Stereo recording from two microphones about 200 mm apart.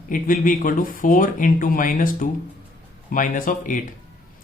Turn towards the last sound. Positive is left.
turn(degrees=40)  # may be behind; listen again after turning